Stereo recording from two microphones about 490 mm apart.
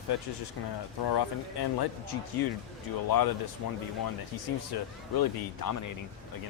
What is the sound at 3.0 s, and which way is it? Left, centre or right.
Speech, left.